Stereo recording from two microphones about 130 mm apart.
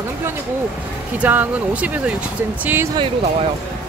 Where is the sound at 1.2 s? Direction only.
10° right (ahead or behind).